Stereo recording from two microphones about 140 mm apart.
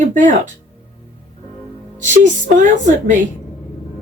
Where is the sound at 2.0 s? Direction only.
60° right (ahead or behind).